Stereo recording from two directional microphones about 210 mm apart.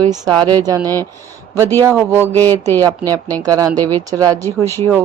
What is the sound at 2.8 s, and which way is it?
Speech, 15° right (ahead or behind).